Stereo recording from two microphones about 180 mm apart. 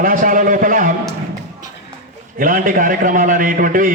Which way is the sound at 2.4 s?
50° right (ahead or behind).